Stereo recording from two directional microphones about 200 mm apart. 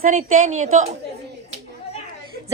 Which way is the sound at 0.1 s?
35° right (ahead or behind).